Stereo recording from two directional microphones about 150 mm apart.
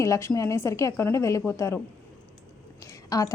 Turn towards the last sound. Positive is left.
turn(degrees=25)  # may be behind; listen again after turning